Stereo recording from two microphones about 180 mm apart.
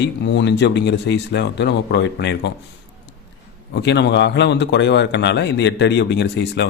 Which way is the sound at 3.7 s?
70° left (ahead or behind).